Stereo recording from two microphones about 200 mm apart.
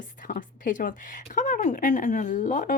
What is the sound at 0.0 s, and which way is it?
A woman's voice, 40° left (ahead or behind).